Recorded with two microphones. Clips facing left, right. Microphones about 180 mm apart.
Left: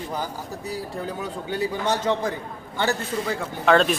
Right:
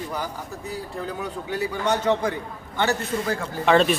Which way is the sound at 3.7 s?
Centre (ahead or behind).